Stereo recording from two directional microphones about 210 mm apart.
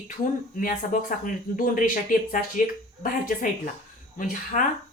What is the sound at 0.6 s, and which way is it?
Speech, 40° left (ahead or behind).